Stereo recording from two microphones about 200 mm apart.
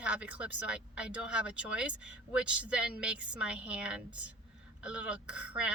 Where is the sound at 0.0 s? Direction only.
5° right (ahead or behind).